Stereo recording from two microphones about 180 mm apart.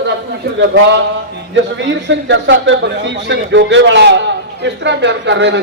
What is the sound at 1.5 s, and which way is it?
A man's voice, 90° right.